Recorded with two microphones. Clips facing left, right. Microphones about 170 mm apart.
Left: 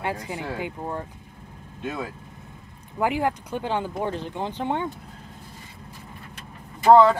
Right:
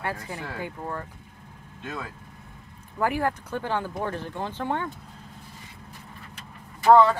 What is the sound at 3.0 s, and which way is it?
Speech, 15° left (ahead or behind).